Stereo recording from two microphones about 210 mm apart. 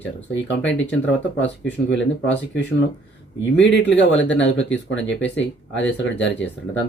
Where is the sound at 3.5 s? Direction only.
60° left (ahead or behind).